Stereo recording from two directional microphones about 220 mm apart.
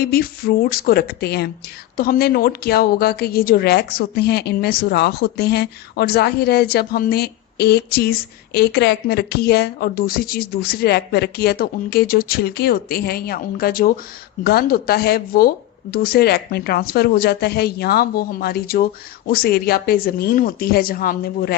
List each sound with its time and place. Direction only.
0.0 s a woman's voice: 45° left (ahead or behind)